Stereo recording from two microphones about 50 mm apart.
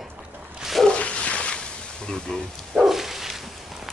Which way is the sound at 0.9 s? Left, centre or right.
Left.